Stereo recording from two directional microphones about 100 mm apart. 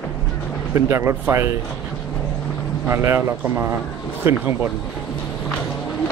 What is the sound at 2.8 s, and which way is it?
Speech, 25° right (ahead or behind).